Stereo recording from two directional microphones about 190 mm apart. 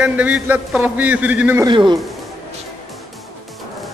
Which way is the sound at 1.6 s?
25° right (ahead or behind).